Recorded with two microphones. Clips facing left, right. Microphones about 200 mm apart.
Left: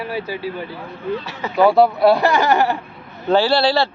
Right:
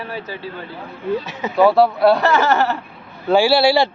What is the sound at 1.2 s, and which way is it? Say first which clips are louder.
Speech: right 2 dB; 20° right (ahead or behind).